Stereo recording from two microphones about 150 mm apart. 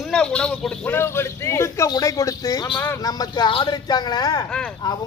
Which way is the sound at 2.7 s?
10° left (ahead or behind).